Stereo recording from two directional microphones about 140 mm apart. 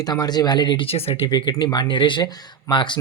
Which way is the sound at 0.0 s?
30° left (ahead or behind).